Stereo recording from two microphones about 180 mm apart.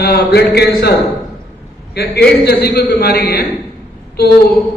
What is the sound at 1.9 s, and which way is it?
A man's voice, 65° left (ahead or behind).